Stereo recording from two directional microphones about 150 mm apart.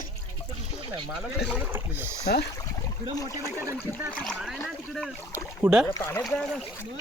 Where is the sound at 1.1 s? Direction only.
Centre (ahead or behind).